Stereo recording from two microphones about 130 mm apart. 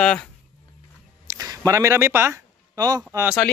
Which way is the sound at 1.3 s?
25° right (ahead or behind).